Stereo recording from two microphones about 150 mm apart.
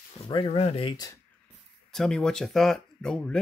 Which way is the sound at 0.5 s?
40° left (ahead or behind).